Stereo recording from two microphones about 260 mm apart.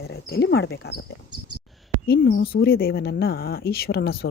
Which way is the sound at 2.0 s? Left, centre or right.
Left.